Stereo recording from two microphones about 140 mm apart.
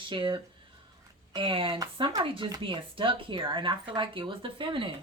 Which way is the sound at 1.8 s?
30° right (ahead or behind).